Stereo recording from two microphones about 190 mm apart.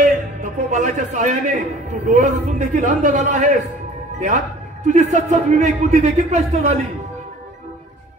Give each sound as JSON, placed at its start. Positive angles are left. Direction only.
{"t": 0.0, "sound": "a man's voice", "side_deg": -40}
{"t": 4.8, "sound": "a man's voice", "side_deg": -40}